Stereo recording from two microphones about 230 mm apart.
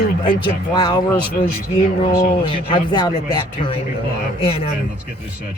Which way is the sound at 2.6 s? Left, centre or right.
Left.